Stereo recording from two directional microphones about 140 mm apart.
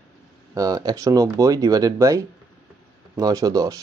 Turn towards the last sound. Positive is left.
turn(degrees=-25)  # may be behind; listen again after turning